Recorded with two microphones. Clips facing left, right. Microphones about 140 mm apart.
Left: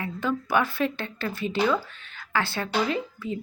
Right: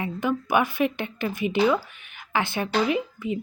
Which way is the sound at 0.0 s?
15° right (ahead or behind).